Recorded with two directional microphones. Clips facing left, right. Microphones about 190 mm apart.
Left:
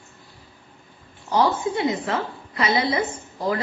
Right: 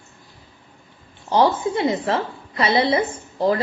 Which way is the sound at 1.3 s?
30° right (ahead or behind).